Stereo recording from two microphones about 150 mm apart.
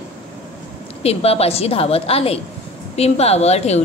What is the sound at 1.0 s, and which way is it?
Speech, 40° left (ahead or behind).